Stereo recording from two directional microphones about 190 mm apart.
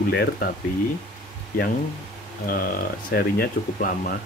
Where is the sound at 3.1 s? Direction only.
50° left (ahead or behind).